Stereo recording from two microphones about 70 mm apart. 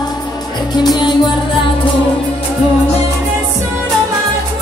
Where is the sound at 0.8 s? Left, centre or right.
Left.